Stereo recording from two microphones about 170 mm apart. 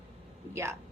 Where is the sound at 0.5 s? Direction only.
15° right (ahead or behind).